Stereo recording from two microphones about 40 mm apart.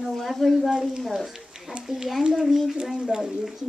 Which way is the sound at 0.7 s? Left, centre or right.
Centre.